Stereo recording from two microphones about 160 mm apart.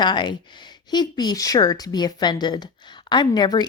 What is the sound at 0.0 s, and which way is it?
Speech, 30° left (ahead or behind).